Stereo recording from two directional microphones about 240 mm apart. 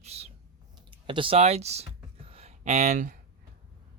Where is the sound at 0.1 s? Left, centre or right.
Right.